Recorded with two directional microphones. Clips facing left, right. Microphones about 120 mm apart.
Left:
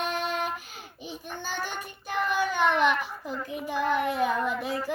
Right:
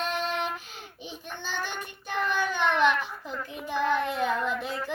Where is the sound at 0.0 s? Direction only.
10° left (ahead or behind).